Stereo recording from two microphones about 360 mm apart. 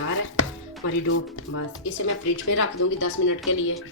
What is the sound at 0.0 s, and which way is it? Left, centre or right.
Chopping, left.